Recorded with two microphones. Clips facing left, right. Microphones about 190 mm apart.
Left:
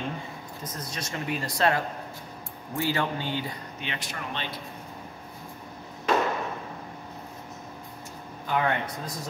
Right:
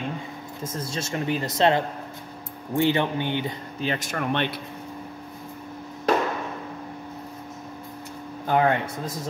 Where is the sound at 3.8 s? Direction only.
40° right (ahead or behind); by 4.6 s 60° right (ahead or behind).